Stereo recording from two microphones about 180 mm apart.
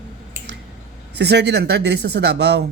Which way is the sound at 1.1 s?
70° right (ahead or behind).